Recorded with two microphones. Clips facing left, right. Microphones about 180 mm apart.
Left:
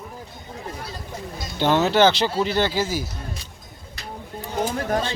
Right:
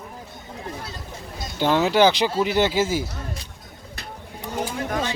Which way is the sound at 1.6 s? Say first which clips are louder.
Even; 10° right (ahead or behind).